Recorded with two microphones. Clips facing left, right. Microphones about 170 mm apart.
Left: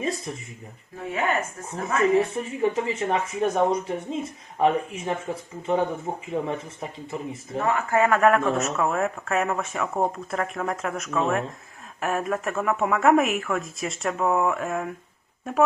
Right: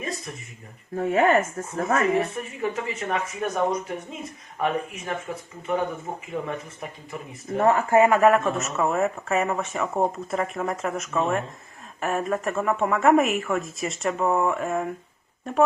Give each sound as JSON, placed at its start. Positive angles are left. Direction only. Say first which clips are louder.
{"t": 0.0, "sound": "a sound", "louder": "left 4 dB", "side_deg": 30}
{"t": 0.9, "sound": "speech", "louder": "right 6 dB", "side_deg": -45}
{"t": 2.0, "sound": "speech", "louder": "left 6 dB", "side_deg": 30}
{"t": 7.6, "sound": "speech", "louder": "right 5 dB", "side_deg": -40}
{"t": 7.9, "sound": "a man's voice", "louder": "right 3 dB", "side_deg": -20}
{"t": 8.1, "sound": "speech", "louder": "right 1 dB", "side_deg": 0}